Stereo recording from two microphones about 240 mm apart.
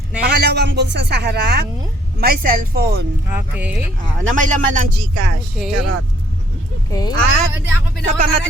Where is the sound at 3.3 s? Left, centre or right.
Centre.